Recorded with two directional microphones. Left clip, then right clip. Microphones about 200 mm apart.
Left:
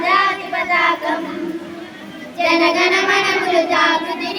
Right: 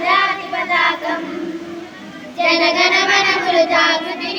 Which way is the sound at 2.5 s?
35° right (ahead or behind).